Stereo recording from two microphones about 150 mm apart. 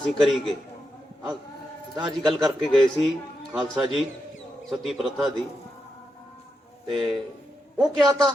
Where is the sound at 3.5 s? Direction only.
5° right (ahead or behind).